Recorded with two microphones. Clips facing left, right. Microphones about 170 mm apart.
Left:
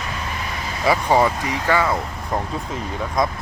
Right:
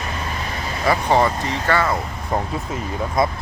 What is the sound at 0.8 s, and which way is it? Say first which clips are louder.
Speech: even; 10° left (ahead or behind).